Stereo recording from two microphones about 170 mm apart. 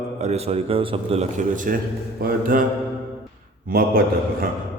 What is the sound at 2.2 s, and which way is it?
Speech, 55° right (ahead or behind).